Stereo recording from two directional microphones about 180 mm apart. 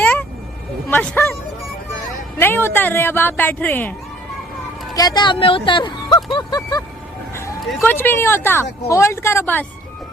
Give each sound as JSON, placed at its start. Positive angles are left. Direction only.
{"t": 0.0, "sound": "vehicle", "side_deg": 10}
{"t": 0.9, "sound": "a sound", "side_deg": 10}
{"t": 2.4, "sound": "speech", "side_deg": 10}
{"t": 4.9, "sound": "speech", "side_deg": 20}
{"t": 6.3, "sound": "a sound", "side_deg": 25}
{"t": 7.3, "sound": "speech", "side_deg": 15}